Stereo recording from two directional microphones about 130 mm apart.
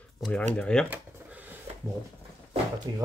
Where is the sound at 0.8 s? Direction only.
15° right (ahead or behind).